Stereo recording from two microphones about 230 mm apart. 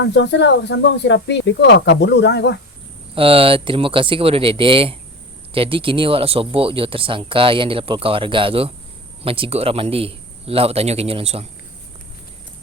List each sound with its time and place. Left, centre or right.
0.0 s speech: left
3.2 s speech: right